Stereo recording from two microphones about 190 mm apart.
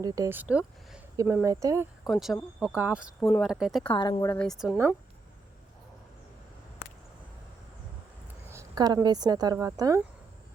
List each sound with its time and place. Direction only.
0.0 s speech: 15° right (ahead or behind)
2.0 s speech: centre (ahead or behind)
3.2 s speech: 10° left (ahead or behind)
3.4 s speech: centre (ahead or behind)
3.8 s a woman's voice: 25° left (ahead or behind)
4.3 s speech: 5° left (ahead or behind)
8.5 s speech: 20° right (ahead or behind)